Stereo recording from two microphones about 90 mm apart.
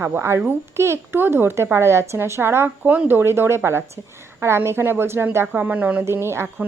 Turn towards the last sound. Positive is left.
turn(degrees=-25)  # may be behind; listen again after turning